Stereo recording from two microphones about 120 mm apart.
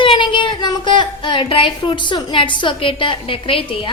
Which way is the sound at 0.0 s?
45° left (ahead or behind).